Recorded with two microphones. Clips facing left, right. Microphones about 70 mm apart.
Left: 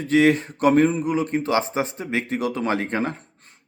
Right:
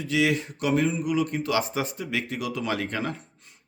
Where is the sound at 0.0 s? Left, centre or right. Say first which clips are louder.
Left 7 dB; left.